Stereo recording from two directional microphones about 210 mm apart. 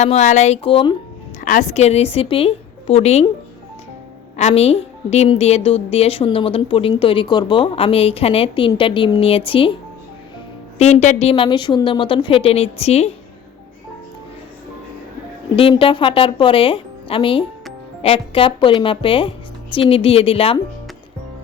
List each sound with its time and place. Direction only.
0.0 s a woman's voice: 30° left (ahead or behind)
1.4 s a woman's voice: 35° left (ahead or behind)
4.4 s a woman's voice: 30° left (ahead or behind)
10.8 s a woman's voice: 30° left (ahead or behind)
15.5 s a woman's voice: 25° left (ahead or behind)